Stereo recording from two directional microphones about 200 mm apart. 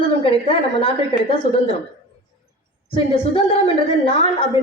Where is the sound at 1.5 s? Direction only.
30° left (ahead or behind).